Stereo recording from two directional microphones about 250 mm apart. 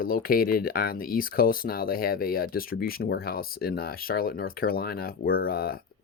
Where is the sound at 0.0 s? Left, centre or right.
Left.